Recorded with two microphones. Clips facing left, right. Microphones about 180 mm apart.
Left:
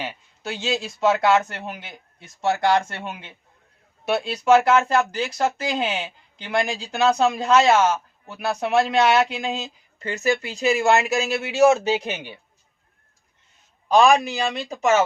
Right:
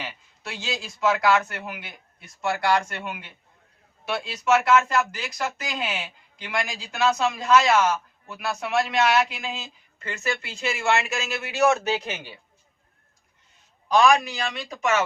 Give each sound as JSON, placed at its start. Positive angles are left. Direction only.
{"t": 0.0, "sound": "speech", "side_deg": 25}
{"t": 13.9, "sound": "speech", "side_deg": 30}